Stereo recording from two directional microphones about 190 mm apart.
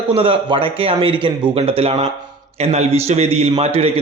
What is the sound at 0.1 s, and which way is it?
A man's voice, 30° right (ahead or behind).